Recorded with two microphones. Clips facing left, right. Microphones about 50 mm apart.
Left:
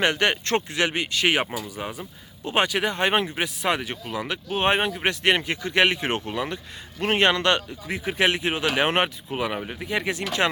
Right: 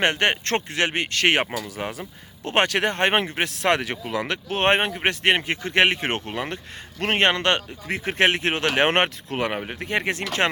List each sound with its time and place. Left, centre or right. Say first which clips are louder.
0.0 s speech: right 1 dB; right
1.7 s speech: right 2 dB; right
2.4 s speech: right 2 dB; right
3.6 s speech: right 5 dB; right
4.6 s speech: right 2 dB; right
4.9 s speech: right 1 dB; right
7.9 s speech: right 2 dB; right